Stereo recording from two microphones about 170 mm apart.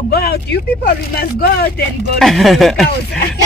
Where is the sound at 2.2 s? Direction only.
Centre (ahead or behind).